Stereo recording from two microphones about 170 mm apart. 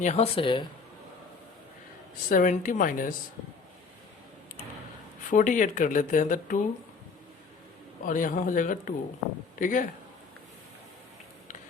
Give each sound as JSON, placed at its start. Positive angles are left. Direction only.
{"t": 0.0, "sound": "speech", "side_deg": 40}
{"t": 2.3, "sound": "speech", "side_deg": 50}
{"t": 5.3, "sound": "speech", "side_deg": 50}
{"t": 8.0, "sound": "speech", "side_deg": 50}